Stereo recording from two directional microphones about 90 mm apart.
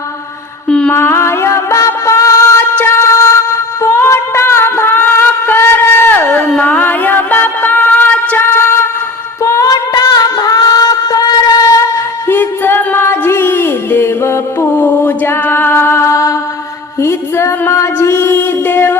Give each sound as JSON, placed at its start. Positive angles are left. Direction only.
{"t": 0.7, "sound": "mantra", "side_deg": 10}
{"t": 0.9, "sound": "music", "side_deg": 25}
{"t": 2.8, "sound": "a sound", "side_deg": 30}
{"t": 6.5, "sound": "music", "side_deg": 15}
{"t": 9.4, "sound": "a sound", "side_deg": 35}
{"t": 12.3, "sound": "music", "side_deg": 25}
{"t": 14.8, "sound": "mantra", "side_deg": 20}
{"t": 17.0, "sound": "music", "side_deg": 30}